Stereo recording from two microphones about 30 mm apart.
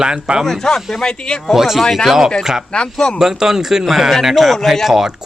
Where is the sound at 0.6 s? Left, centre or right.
Left.